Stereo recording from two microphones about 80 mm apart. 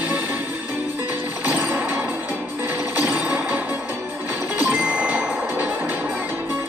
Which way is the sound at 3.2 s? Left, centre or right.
Centre.